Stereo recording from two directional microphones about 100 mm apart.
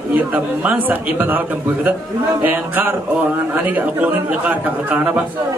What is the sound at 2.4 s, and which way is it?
A man's voice, 20° right (ahead or behind).